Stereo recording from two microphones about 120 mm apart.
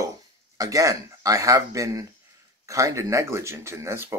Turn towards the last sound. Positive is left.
turn(degrees=-25)  # may be behind; listen again after turning